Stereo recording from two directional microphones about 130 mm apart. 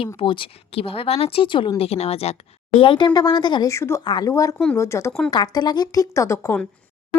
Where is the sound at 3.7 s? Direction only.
20° left (ahead or behind).